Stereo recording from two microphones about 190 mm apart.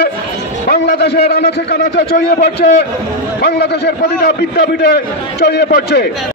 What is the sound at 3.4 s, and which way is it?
A man's voice, 60° left (ahead or behind).